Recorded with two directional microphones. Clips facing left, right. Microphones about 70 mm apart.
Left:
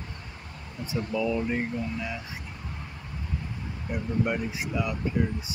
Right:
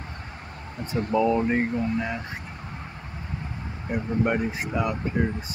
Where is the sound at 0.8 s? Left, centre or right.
Right.